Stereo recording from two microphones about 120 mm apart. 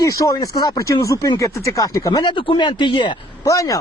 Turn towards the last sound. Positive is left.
turn(degrees=25)  # may be behind; listen again after turning